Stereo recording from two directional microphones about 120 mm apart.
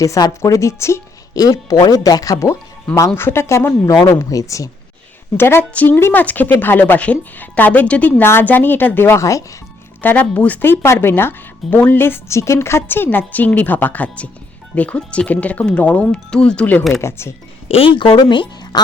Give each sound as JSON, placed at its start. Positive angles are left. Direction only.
{"t": 0.0, "sound": "speech", "side_deg": 30}
{"t": 10.0, "sound": "speech", "side_deg": 15}
{"t": 17.0, "sound": "speech", "side_deg": 20}
{"t": 17.7, "sound": "speech", "side_deg": 50}